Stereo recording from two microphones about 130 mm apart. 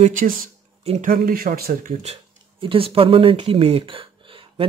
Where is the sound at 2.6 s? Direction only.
45° right (ahead or behind).